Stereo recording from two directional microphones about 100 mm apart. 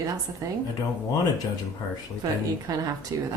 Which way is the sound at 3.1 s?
35° right (ahead or behind).